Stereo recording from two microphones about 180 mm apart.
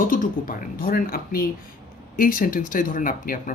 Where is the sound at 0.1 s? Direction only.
50° left (ahead or behind).